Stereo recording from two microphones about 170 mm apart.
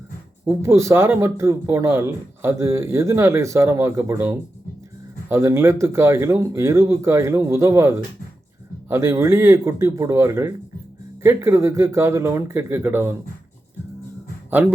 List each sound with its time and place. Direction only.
0.4 s a man's voice: 15° right (ahead or behind)